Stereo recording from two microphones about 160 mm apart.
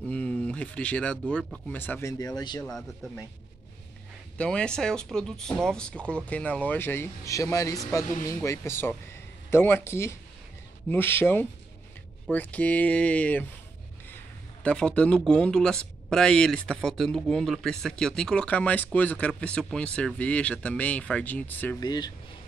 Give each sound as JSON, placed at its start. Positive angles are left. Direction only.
{"t": 0.1, "sound": "speech", "side_deg": 10}
{"t": 2.6, "sound": "speech", "side_deg": 0}
{"t": 4.4, "sound": "speech", "side_deg": 5}
{"t": 14.6, "sound": "speech", "side_deg": 5}
{"t": 21.7, "sound": "speech", "side_deg": 25}